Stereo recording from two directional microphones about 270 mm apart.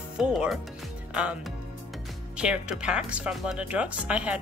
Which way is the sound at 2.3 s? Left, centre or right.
Centre.